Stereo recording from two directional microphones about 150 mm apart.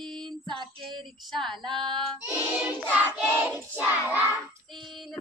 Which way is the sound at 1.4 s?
Centre (ahead or behind).